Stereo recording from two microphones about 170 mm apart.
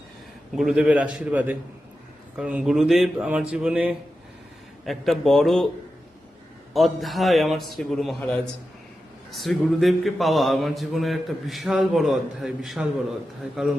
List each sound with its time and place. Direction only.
0.5 s a man's voice: 5° right (ahead or behind)
2.3 s mantra: 10° right (ahead or behind)
3.5 s a man's voice: 5° right (ahead or behind)
4.9 s mantra: centre (ahead or behind)
6.7 s mantra: centre (ahead or behind)